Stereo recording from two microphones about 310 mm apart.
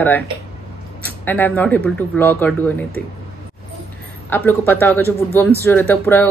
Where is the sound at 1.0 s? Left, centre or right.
Centre.